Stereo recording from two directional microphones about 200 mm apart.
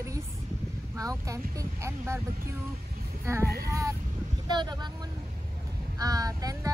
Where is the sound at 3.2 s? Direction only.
15° right (ahead or behind).